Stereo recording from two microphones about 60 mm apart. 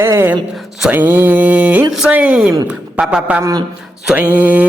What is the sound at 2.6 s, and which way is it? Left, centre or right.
Speech, centre.